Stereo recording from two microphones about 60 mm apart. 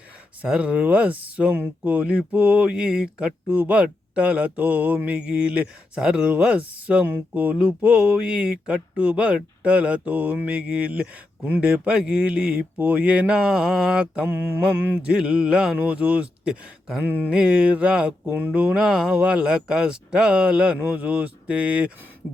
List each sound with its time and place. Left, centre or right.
0.4 s speech: centre
3.5 s speech: right
14.3 s mantra: right
14.9 s speech: centre
17.2 s speech: centre
18.8 s speech: centre